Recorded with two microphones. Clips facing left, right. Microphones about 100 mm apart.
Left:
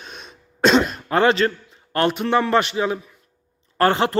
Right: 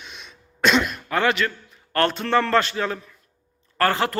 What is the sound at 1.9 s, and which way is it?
Speech, 15° left (ahead or behind).